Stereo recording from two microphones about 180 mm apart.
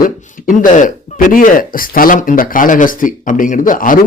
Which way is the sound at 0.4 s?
45° left (ahead or behind).